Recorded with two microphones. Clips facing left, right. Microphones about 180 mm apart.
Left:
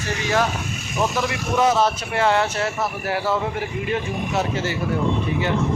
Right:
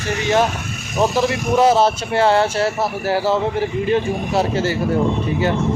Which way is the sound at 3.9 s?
30° right (ahead or behind).